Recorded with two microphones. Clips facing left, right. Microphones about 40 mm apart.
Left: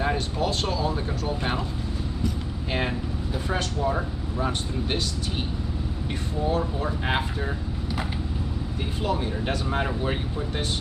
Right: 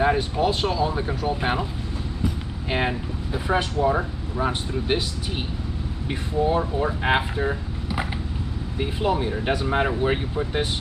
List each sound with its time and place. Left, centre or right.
0.0 s speech: centre
2.2 s vehicle: centre
3.4 s speech: centre
6.4 s speech: centre
9.0 s speech: centre